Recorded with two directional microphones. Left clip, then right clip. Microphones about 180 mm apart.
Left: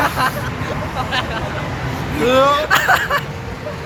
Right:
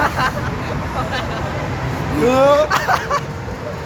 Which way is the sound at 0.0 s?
55° left (ahead or behind).